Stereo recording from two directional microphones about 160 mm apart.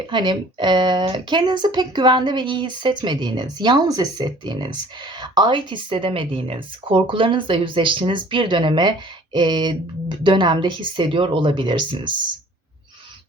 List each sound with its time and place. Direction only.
0.1 s speech: 30° right (ahead or behind)